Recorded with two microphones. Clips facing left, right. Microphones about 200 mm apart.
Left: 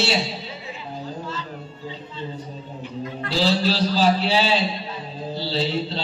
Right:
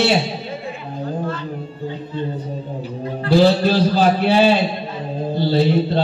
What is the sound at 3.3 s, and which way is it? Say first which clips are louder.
A man's voice: right 8 dB; 55° right (ahead or behind).